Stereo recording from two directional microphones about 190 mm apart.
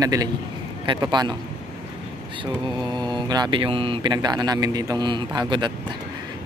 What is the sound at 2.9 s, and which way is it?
Speech, 25° right (ahead or behind).